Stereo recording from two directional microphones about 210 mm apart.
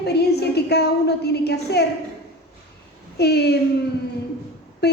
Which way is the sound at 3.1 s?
50° left (ahead or behind).